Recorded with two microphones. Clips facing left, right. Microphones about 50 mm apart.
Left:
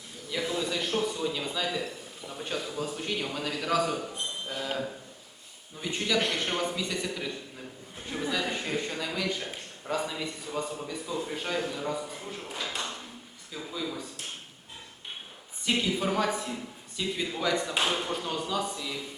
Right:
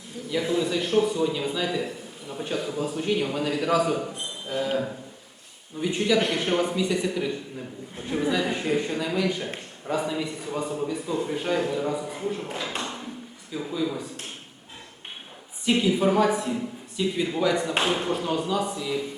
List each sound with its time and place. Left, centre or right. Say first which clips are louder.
0.3 s a man's voice: right 6 dB; centre
5.8 s a man's voice: right 6 dB; centre
12.8 s ping: right 4 dB; centre
13.5 s a man's voice: right 7 dB; centre
15.6 s a man's voice: right 6 dB; centre